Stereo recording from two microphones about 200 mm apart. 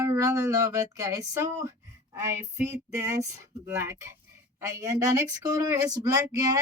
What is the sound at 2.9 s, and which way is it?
Speech, 15° right (ahead or behind).